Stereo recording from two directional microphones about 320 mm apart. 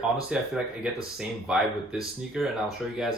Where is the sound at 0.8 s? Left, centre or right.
Centre.